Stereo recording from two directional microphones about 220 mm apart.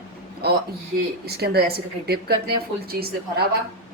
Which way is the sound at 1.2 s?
45° right (ahead or behind).